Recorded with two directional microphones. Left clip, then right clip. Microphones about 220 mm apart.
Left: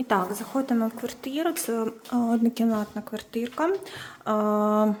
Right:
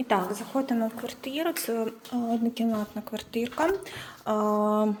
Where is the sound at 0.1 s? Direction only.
20° left (ahead or behind).